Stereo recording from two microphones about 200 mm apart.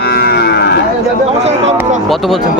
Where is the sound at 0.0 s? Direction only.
50° left (ahead or behind).